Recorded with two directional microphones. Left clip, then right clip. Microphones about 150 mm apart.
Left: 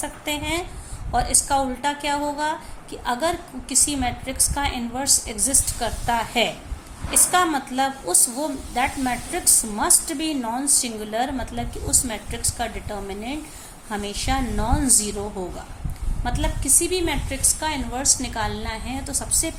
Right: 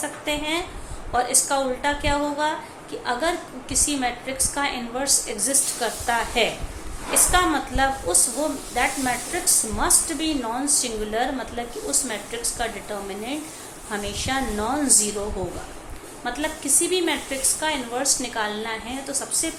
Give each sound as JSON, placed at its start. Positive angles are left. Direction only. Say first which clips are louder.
{"t": 0.0, "sound": "a woman's voice", "louder": "right 1 dB", "side_deg": 50}
{"t": 13.9, "sound": "a woman's voice", "louder": "even", "side_deg": 55}
{"t": 16.2, "sound": "a woman's voice", "louder": "even", "side_deg": 55}